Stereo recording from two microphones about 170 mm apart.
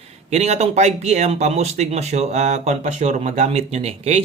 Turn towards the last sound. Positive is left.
turn(degrees=-40)  # may be behind; listen again after turning